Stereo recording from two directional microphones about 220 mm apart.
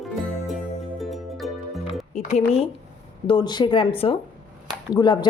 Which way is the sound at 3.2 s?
20° left (ahead or behind).